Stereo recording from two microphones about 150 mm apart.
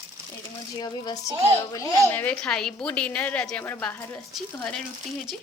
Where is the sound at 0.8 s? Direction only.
25° left (ahead or behind).